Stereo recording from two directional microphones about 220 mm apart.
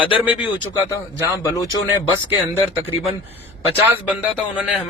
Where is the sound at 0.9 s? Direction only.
15° left (ahead or behind).